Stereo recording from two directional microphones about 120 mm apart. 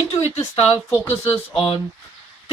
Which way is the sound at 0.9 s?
20° left (ahead or behind).